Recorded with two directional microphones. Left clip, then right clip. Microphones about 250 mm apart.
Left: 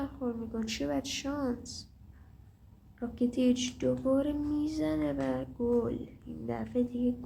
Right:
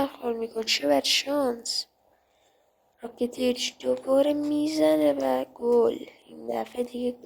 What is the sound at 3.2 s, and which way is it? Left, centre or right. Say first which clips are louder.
A woman's voice: right 4 dB; right.